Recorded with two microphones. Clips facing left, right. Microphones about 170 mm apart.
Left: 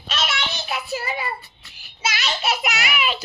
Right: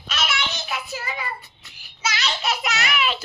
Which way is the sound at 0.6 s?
20° left (ahead or behind).